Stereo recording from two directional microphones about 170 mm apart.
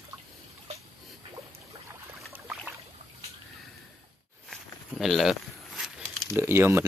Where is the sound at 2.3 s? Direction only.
10° right (ahead or behind).